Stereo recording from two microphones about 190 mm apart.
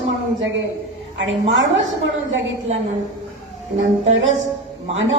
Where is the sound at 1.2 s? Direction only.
80° right.